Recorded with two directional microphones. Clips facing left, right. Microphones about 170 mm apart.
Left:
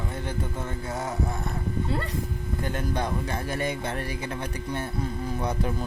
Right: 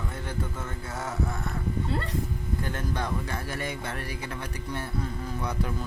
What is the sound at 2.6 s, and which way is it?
Speech, 20° left (ahead or behind).